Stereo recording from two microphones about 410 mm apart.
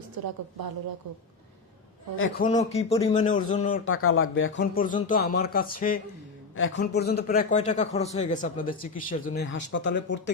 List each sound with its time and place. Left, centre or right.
0.2 s a woman's voice: right
2.1 s a man's voice: left
3.8 s a man's voice: left